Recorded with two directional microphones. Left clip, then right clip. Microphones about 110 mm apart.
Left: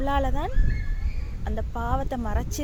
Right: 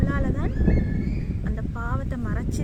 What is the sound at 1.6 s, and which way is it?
Speech, 30° right (ahead or behind).